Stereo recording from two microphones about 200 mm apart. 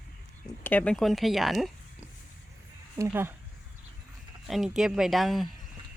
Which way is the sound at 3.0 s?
10° right (ahead or behind).